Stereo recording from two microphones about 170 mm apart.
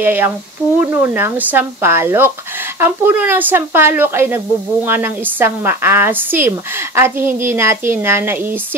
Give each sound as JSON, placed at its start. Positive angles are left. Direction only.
{"t": 0.0, "sound": "a woman's voice", "side_deg": -10}